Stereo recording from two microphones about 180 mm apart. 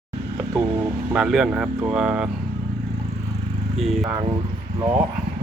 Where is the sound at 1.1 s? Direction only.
5° right (ahead or behind).